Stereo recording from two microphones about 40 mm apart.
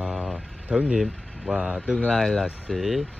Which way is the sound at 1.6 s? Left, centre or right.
Centre.